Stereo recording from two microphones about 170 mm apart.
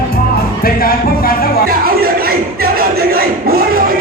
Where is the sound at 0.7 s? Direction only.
60° left (ahead or behind).